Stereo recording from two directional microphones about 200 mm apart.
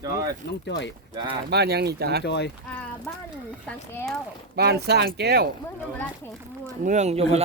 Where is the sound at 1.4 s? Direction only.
55° right (ahead or behind).